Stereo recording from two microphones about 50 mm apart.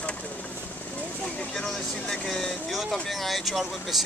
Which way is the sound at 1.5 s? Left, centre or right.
Centre.